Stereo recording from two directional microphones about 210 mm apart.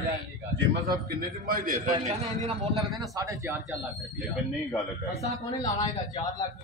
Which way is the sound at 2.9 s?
15° right (ahead or behind).